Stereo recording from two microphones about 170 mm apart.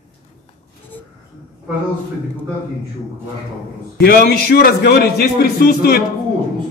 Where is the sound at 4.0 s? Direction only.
65° left (ahead or behind).